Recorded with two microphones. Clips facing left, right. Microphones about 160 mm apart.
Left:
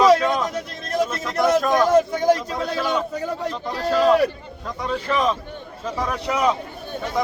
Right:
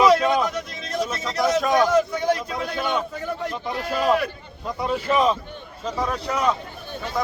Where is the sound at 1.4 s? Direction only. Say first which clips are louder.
Left 2 dB; 55° left (ahead or behind); by 3.0 s 40° left (ahead or behind).